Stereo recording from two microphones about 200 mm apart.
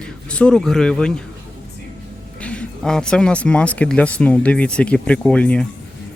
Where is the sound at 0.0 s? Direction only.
5° left (ahead or behind).